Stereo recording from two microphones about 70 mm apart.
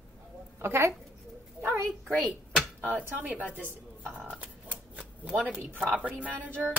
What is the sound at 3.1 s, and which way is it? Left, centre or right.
Speech, right.